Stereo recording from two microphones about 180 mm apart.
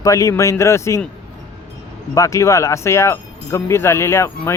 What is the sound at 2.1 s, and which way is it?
Speech, 15° left (ahead or behind).